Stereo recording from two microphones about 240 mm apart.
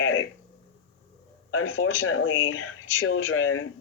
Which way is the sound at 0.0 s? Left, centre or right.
Left.